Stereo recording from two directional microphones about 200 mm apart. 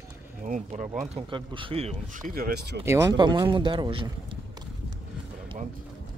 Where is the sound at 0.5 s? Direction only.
40° right (ahead or behind).